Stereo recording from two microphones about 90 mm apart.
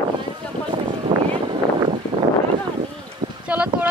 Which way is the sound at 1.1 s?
65° right (ahead or behind).